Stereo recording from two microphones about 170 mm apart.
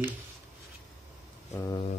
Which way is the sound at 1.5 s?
20° left (ahead or behind).